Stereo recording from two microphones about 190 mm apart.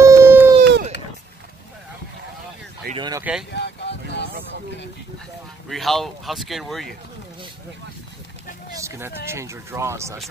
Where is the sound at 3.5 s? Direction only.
65° left (ahead or behind).